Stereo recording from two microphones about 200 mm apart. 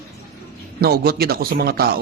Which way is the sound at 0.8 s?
50° right (ahead or behind).